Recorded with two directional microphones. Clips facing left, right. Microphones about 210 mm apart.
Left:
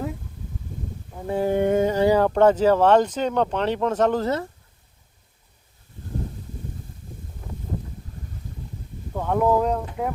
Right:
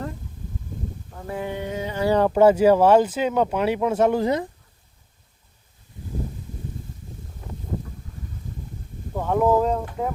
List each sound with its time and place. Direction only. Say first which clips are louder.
1.3 s speech: left 7 dB; 35° left (ahead or behind)
1.5 s a sound: left 10 dB; 50° left (ahead or behind)
2.1 s speech: right 6 dB; 5° right (ahead or behind)
9.1 s speech: right 1 dB; 5° right (ahead or behind)